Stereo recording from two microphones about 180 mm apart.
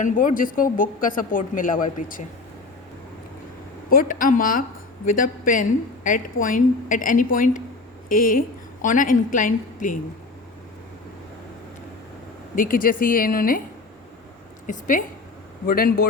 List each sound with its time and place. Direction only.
0.0 s speech: 50° left (ahead or behind)
3.8 s speech: 50° left (ahead or behind)
12.5 s speech: 50° left (ahead or behind)
14.7 s speech: 50° left (ahead or behind)